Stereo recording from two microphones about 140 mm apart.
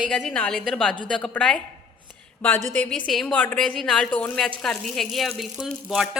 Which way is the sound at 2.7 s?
10° left (ahead or behind).